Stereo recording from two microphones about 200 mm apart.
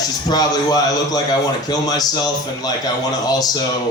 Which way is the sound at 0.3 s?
20° left (ahead or behind).